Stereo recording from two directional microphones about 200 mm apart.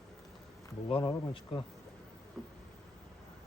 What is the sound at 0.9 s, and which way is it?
Speech, 20° left (ahead or behind).